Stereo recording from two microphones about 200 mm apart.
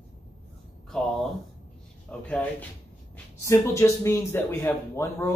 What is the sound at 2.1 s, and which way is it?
Speech, 5° left (ahead or behind).